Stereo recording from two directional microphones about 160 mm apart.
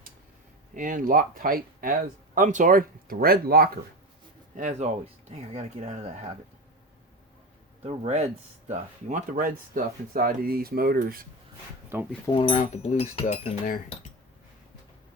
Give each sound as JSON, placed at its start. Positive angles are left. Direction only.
{"t": 0.7, "sound": "speech", "side_deg": -55}
{"t": 4.5, "sound": "speech", "side_deg": -50}
{"t": 5.3, "sound": "speech", "side_deg": -40}
{"t": 7.9, "sound": "speech", "side_deg": -40}
{"t": 11.9, "sound": "speech", "side_deg": -15}
{"t": 12.5, "sound": "speech", "side_deg": 45}